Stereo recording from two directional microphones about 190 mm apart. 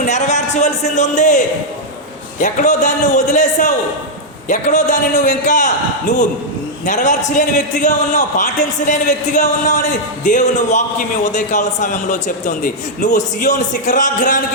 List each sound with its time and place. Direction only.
0.0 s a man's voice: 40° left (ahead or behind)
2.4 s a man's voice: 40° left (ahead or behind)